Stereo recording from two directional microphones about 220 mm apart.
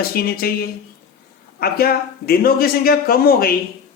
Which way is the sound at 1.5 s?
45° left (ahead or behind).